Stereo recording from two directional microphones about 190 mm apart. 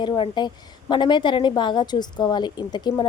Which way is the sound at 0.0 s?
25° left (ahead or behind).